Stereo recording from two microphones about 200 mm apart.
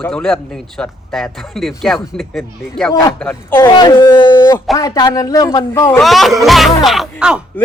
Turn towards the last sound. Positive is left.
turn(degrees=-5)  # may be behind; listen again after turning